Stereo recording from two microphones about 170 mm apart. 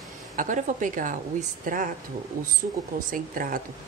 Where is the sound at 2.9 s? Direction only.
55° right (ahead or behind).